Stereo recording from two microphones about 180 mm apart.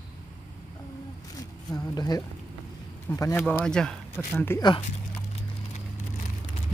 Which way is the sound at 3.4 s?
Centre (ahead or behind).